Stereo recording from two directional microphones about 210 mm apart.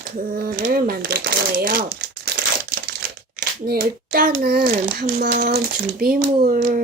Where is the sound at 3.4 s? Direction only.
45° right (ahead or behind).